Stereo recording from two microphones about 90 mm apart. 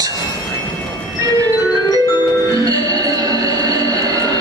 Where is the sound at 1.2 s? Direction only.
45° right (ahead or behind).